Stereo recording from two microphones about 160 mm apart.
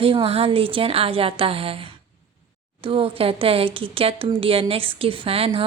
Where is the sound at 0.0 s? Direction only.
35° right (ahead or behind).